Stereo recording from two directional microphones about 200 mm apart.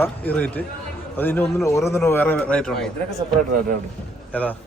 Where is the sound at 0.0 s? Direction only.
5° left (ahead or behind).